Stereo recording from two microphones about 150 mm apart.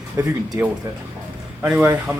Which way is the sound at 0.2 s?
20° right (ahead or behind).